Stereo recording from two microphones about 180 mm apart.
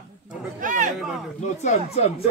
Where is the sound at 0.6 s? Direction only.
45° right (ahead or behind).